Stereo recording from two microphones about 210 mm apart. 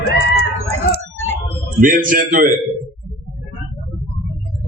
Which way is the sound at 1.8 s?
40° right (ahead or behind).